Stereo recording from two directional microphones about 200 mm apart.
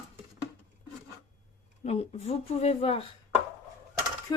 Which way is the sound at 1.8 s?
30° left (ahead or behind).